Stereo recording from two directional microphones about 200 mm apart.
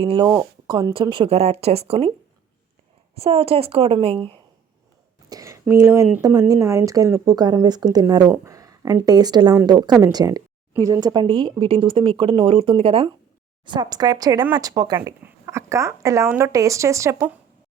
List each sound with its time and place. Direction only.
0.0 s a woman's voice: 30° right (ahead or behind)
3.2 s a woman's voice: 30° right (ahead or behind)
5.3 s speech: 15° right (ahead or behind)
8.4 s a sound: 15° right (ahead or behind)
9.0 s a woman's voice: 20° right (ahead or behind)